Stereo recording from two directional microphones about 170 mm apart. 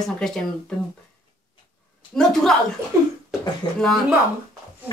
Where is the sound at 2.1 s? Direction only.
5° left (ahead or behind).